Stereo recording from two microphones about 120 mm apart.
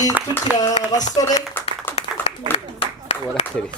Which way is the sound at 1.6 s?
15° left (ahead or behind).